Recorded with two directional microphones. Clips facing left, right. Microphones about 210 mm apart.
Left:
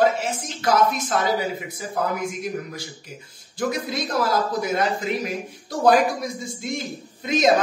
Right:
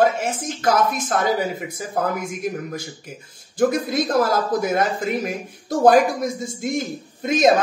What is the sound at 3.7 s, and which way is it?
Speech, 50° right (ahead or behind).